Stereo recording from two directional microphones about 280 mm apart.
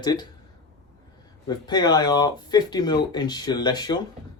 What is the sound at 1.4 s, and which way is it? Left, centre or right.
Speech, centre.